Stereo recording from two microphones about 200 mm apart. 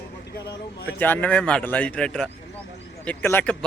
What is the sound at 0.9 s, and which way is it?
A man's voice, 10° left (ahead or behind).